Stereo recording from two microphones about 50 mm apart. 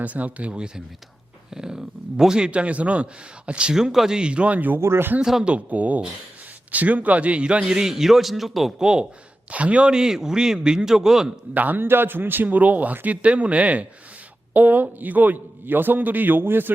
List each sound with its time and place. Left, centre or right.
0.0 s speech: right
1.5 s a sound: centre
2.5 s a man's voice: right; by 4.2 s centre
4.2 s speech: right
4.8 s speech: right
5.2 s a man's voice: centre
5.5 s a man's voice: right
7.7 s speech: centre
9.5 s a man's voice: right; by 11.3 s centre
11.5 s a man's voice: right
11.9 s a man's voice: right